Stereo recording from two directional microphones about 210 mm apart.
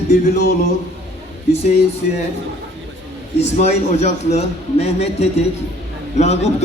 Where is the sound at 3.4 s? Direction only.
30° left (ahead or behind).